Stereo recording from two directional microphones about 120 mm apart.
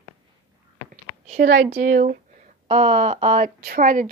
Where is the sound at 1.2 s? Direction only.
80° right.